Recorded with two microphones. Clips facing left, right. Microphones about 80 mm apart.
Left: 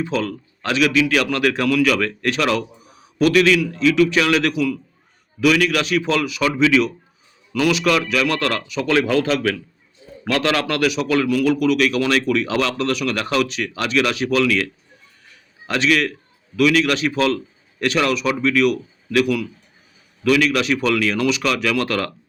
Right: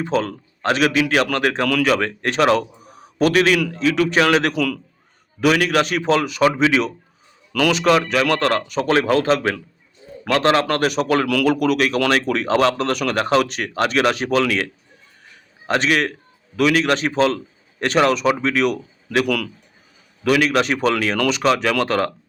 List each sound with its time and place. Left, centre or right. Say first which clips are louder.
0.0 s a man's voice: right 1 dB; right
19.1 s speech: left 1 dB; right